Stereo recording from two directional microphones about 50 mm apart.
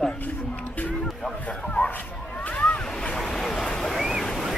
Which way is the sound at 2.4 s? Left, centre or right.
Left.